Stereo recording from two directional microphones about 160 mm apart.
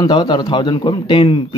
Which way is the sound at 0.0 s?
25° left (ahead or behind).